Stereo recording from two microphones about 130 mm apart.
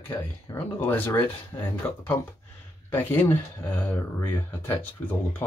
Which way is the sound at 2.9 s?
15° left (ahead or behind).